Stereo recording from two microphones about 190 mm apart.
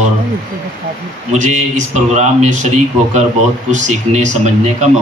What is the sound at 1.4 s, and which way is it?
Speech, 40° right (ahead or behind).